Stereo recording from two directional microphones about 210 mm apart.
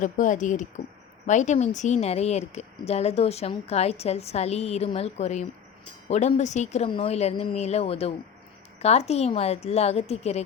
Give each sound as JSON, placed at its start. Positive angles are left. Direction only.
{"t": 0.0, "sound": "speech", "side_deg": 35}